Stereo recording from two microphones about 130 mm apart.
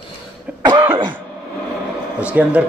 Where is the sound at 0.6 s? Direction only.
35° right (ahead or behind).